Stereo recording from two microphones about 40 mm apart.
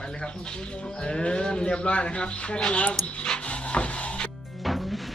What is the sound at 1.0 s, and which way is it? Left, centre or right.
Speech, left.